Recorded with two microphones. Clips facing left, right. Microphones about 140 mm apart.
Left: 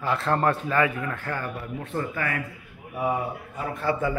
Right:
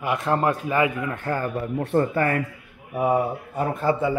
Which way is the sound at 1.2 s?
40° right (ahead or behind).